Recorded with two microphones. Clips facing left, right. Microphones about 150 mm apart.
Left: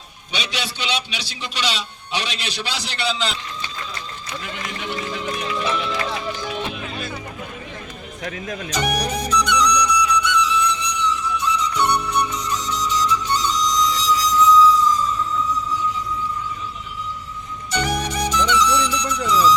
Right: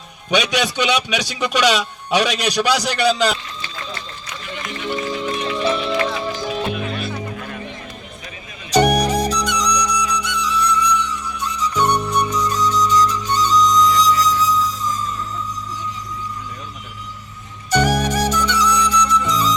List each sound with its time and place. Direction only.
0.3 s a man's voice: 45° right (ahead or behind)
5.3 s music: 30° right (ahead or behind)
8.7 s music: 35° right (ahead or behind)
17.7 s music: 45° right (ahead or behind)